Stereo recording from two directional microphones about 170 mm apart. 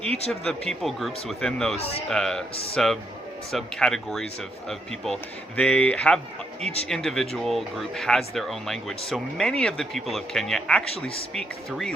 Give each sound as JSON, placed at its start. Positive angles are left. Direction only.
{"t": 0.3, "sound": "speech", "side_deg": 5}
{"t": 1.8, "sound": "speech", "side_deg": 35}
{"t": 2.0, "sound": "speech", "side_deg": 5}